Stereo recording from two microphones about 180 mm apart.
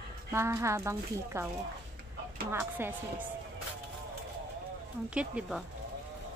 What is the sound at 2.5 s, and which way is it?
Speech, 10° right (ahead or behind).